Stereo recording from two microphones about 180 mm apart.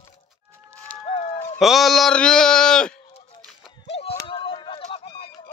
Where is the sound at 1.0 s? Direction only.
35° left (ahead or behind).